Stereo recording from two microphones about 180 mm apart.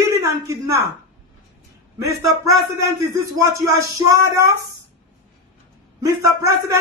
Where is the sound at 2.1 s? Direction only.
15° right (ahead or behind).